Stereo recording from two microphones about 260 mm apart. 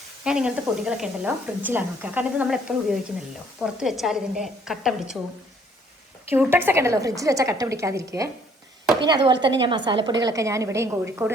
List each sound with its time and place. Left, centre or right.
0.3 s speech: centre
6.3 s a woman's voice: centre